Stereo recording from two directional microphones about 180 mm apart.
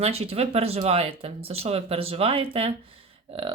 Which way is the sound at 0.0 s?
35° right (ahead or behind).